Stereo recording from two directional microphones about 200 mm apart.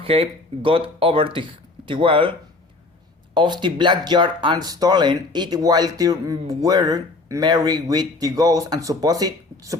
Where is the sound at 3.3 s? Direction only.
20° right (ahead or behind).